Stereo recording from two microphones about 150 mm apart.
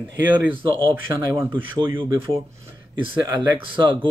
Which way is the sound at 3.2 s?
20° right (ahead or behind).